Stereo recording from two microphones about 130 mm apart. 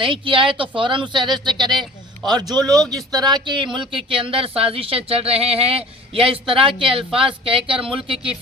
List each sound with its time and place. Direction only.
0.0 s speech: 40° right (ahead or behind)